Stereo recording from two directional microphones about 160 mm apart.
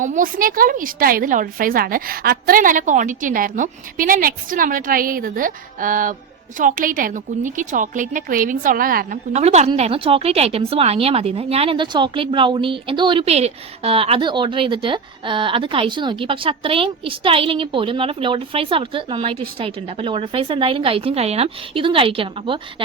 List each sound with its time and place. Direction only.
0.0 s a woman's voice: 55° right (ahead or behind)
9.3 s a woman's voice: 45° right (ahead or behind)